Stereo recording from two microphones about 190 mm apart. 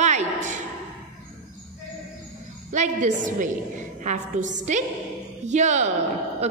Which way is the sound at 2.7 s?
40° right (ahead or behind).